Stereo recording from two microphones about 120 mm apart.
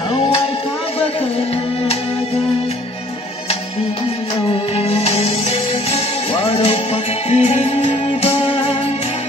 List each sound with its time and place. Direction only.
4.5 s music: 55° left (ahead or behind)